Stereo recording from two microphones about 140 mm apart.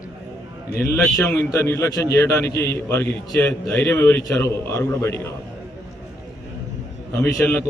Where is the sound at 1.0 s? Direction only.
5° left (ahead or behind).